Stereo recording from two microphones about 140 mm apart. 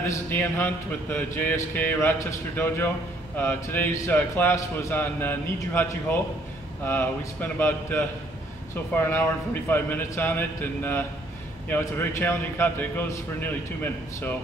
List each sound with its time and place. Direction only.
0.0 s a man's voice: 15° left (ahead or behind)